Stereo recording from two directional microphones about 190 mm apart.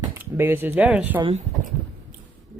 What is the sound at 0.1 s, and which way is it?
Speech, 10° right (ahead or behind).